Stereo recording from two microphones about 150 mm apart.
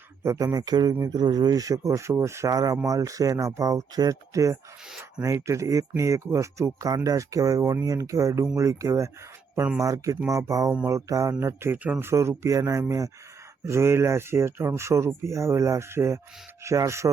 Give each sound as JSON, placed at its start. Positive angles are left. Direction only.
{"t": 0.2, "sound": "speech", "side_deg": -20}
{"t": 9.8, "sound": "speech", "side_deg": -20}